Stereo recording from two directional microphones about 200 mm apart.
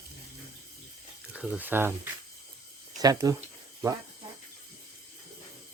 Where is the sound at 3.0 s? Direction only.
20° right (ahead or behind).